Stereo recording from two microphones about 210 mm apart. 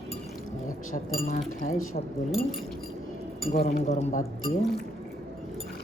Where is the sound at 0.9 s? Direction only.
35° left (ahead or behind).